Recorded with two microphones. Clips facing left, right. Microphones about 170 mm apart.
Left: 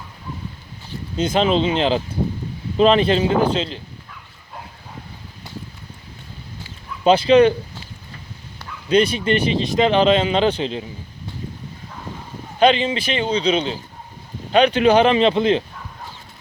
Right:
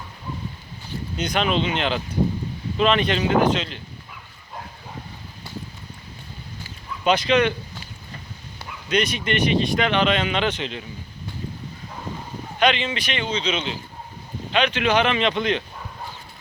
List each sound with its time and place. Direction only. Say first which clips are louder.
1.1 s a man's voice: left 5 dB; 30° left (ahead or behind)
7.0 s a man's voice: left 7 dB; 30° left (ahead or behind)
8.9 s a man's voice: left 6 dB; 30° left (ahead or behind)
12.5 s a man's voice: left 5 dB; 35° left (ahead or behind)